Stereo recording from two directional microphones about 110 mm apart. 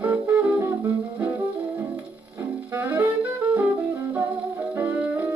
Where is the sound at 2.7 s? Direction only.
20° right (ahead or behind).